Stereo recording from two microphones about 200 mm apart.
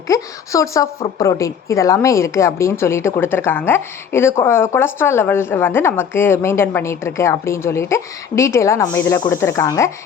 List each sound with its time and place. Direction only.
0.1 s a woman's voice: 15° left (ahead or behind)